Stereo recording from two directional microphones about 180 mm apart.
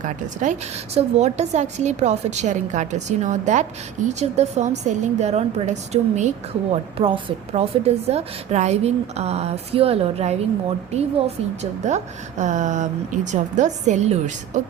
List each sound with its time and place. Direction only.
0.9 s a woman's voice: 35° right (ahead or behind)